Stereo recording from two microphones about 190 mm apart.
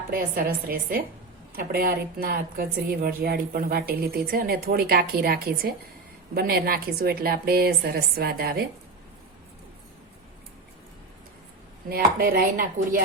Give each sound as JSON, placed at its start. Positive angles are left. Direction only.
{"t": 0.1, "sound": "speech", "side_deg": -50}
{"t": 11.9, "sound": "speech", "side_deg": -50}